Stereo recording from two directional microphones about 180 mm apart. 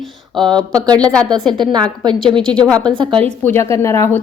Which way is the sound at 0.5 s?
20° right (ahead or behind).